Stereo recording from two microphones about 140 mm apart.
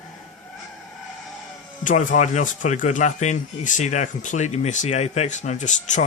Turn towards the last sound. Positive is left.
turn(degrees=60)  # may be behind; listen again after turning